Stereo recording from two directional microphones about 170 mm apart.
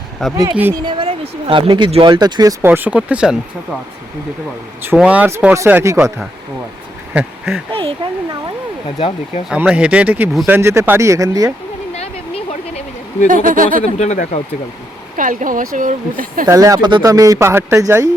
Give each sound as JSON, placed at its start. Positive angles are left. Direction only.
{"t": 0.2, "sound": "speech", "side_deg": 5}
{"t": 0.5, "sound": "speech", "side_deg": -10}
{"t": 0.9, "sound": "speech", "side_deg": -30}
{"t": 4.8, "sound": "speech", "side_deg": -10}
{"t": 7.1, "sound": "speech", "side_deg": -5}
{"t": 7.7, "sound": "speech", "side_deg": -30}
{"t": 9.0, "sound": "speech", "side_deg": 35}
{"t": 9.5, "sound": "speech", "side_deg": -5}
{"t": 11.9, "sound": "a sound", "side_deg": 40}
{"t": 13.2, "sound": "speech", "side_deg": -50}
{"t": 13.8, "sound": "speech", "side_deg": 40}
{"t": 15.1, "sound": "speech", "side_deg": -50}
{"t": 16.5, "sound": "speech", "side_deg": -20}